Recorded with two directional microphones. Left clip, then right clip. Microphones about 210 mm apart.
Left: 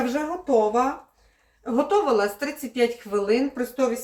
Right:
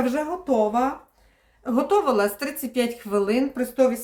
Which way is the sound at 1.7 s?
45° right (ahead or behind).